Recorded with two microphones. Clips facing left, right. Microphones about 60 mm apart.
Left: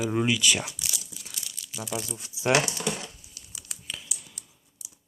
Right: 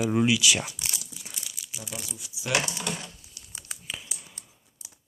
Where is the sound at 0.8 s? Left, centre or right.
Right.